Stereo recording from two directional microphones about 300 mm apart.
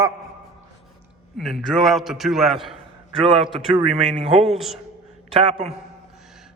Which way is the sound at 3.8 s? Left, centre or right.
Centre.